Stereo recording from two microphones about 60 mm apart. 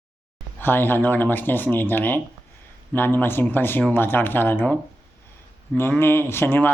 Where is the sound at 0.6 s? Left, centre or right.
Left.